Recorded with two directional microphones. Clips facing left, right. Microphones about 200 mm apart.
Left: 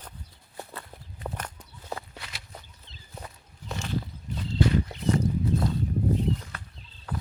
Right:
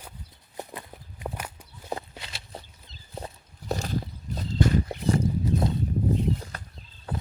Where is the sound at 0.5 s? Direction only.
15° right (ahead or behind).